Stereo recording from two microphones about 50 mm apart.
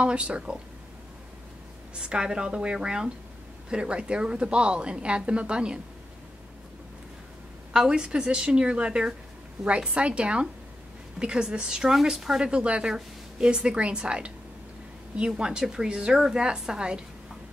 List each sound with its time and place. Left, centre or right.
0.0 s a woman's voice: right
2.0 s a woman's voice: centre
7.7 s a woman's voice: centre
12.4 s a woman's voice: right